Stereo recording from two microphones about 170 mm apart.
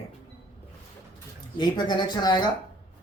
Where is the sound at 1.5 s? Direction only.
25° left (ahead or behind).